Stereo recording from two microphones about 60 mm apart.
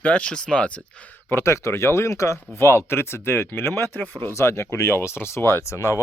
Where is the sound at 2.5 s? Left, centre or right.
Left.